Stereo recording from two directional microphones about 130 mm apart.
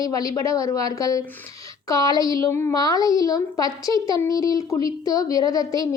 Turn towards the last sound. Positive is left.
turn(degrees=30)  # may be behind; listen again after turning